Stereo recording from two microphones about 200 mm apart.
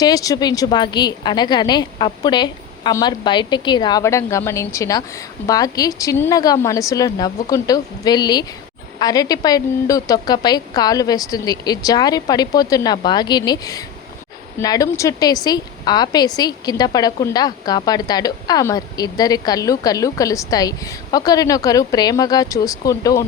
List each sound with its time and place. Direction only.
0.0 s a woman's voice: 20° left (ahead or behind)